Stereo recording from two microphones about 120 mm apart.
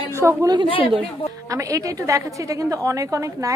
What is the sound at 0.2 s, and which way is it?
A woman's voice, 25° right (ahead or behind).